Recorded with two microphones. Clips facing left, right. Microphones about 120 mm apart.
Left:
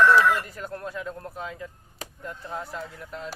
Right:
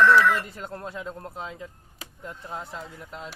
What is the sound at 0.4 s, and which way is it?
A man's voice, 25° right (ahead or behind).